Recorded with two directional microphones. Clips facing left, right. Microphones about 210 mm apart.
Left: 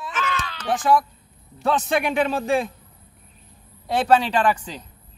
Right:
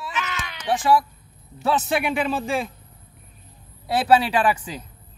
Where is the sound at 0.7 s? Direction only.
Centre (ahead or behind).